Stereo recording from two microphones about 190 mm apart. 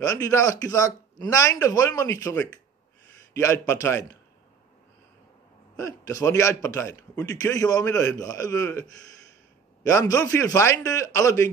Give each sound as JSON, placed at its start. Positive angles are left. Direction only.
{"t": 0.0, "sound": "a man's voice", "side_deg": 15}
{"t": 5.8, "sound": "a man's voice", "side_deg": 15}
{"t": 9.8, "sound": "a man's voice", "side_deg": 15}